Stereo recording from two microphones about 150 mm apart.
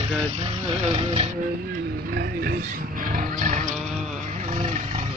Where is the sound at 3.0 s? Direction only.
65° right (ahead or behind).